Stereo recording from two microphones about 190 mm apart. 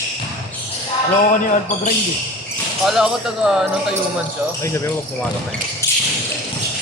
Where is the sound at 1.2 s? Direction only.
45° left (ahead or behind).